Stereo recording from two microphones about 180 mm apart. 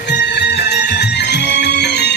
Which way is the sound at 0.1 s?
70° left (ahead or behind).